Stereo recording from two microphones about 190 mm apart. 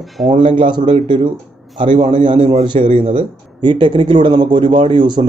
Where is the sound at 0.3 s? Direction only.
25° right (ahead or behind).